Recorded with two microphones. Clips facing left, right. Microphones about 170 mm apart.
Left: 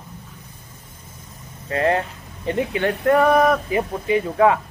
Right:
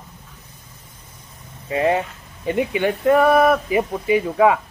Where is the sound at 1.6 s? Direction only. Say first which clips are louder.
Right 1 dB; 15° right (ahead or behind).